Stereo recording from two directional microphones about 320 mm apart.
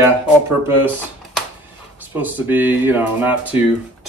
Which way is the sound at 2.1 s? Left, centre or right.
Centre.